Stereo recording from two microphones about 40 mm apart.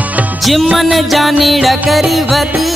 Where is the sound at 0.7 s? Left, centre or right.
Centre.